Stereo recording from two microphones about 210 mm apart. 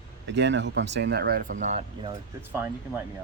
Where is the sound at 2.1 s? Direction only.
10° right (ahead or behind).